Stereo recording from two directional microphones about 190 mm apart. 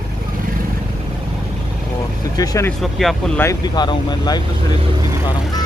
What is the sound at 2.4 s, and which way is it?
Speech, 15° left (ahead or behind).